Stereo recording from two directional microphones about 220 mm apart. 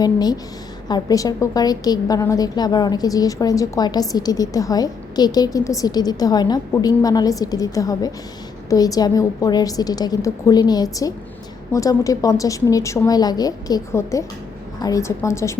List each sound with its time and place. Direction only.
0.0 s a woman's voice: 20° left (ahead or behind)